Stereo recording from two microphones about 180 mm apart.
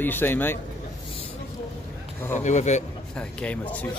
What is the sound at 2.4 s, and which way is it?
Speech, 40° left (ahead or behind).